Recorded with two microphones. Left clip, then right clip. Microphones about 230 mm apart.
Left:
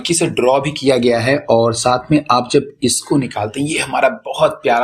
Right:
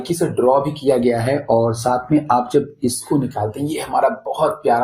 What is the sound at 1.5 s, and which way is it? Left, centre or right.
Speech, left.